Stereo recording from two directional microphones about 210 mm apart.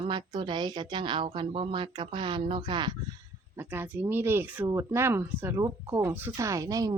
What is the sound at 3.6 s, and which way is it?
Speech, 10° right (ahead or behind).